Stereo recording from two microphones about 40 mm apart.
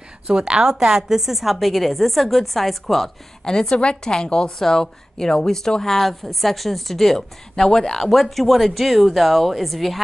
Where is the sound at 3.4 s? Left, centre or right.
Centre.